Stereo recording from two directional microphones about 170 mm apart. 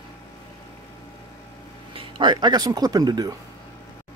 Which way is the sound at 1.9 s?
30° right (ahead or behind).